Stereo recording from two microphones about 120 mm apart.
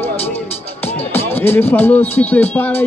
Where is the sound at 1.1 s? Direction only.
20° left (ahead or behind).